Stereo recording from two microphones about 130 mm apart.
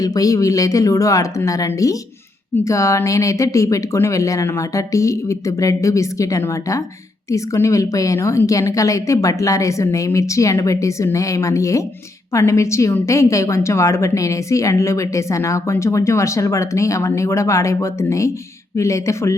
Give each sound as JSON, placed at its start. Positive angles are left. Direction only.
{"t": 0.0, "sound": "a woman's voice", "side_deg": 25}